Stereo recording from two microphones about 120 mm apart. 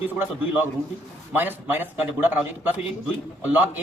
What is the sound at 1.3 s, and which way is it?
A man's voice, 15° right (ahead or behind).